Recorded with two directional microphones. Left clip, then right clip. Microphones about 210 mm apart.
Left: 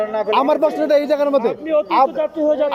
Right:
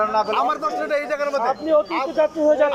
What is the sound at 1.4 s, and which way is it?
Speech, 25° left (ahead or behind).